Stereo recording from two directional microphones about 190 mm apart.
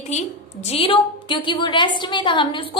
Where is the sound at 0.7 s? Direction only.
30° left (ahead or behind).